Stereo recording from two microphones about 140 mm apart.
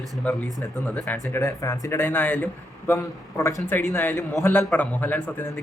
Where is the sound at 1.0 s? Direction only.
15° left (ahead or behind).